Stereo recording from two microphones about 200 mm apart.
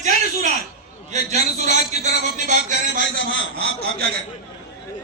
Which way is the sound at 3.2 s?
70° left (ahead or behind).